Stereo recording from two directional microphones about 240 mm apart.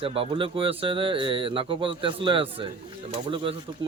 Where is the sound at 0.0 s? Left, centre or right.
Right.